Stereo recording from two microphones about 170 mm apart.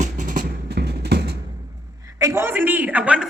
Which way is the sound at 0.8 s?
70° right (ahead or behind).